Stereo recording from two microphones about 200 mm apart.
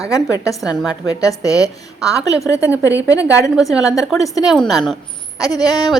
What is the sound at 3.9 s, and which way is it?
Speech, 15° left (ahead or behind).